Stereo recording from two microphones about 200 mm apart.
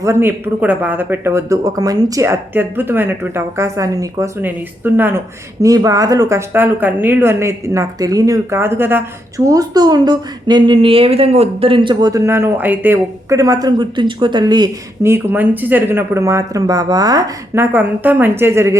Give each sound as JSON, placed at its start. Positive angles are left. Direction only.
{"t": 0.0, "sound": "speech", "side_deg": -10}